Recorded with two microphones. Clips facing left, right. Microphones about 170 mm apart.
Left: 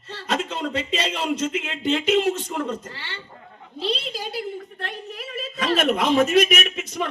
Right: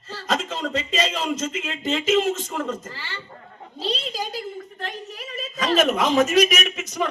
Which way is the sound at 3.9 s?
65° left (ahead or behind).